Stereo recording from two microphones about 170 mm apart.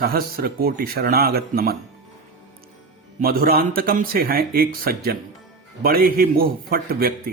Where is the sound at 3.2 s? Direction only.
60° right (ahead or behind).